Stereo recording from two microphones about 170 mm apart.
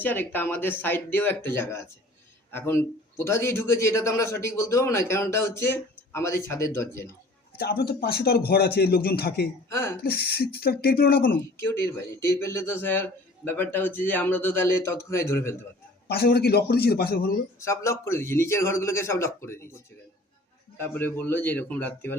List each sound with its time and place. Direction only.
0.0 s a man's voice: 10° left (ahead or behind)
7.6 s a man's voice: 65° left (ahead or behind)
9.6 s a man's voice: 15° left (ahead or behind)
10.0 s speech: 65° left (ahead or behind)
11.3 s a man's voice: 15° left (ahead or behind)
16.0 s speech: 70° left (ahead or behind)
17.6 s a man's voice: 15° left (ahead or behind)